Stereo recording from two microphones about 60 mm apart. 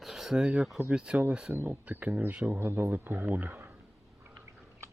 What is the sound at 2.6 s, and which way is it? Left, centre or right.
Speech, right.